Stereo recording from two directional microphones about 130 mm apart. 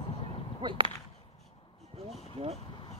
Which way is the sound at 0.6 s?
35° right (ahead or behind).